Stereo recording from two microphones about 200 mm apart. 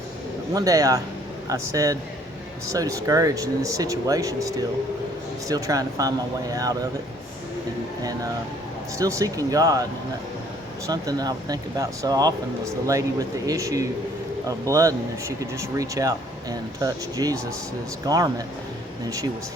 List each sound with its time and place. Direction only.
0.5 s speech: 15° right (ahead or behind)
9.0 s speech: 15° right (ahead or behind)
10.8 s speech: 20° right (ahead or behind)